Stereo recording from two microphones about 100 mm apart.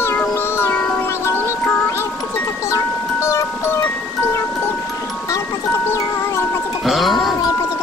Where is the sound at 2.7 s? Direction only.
30° left (ahead or behind).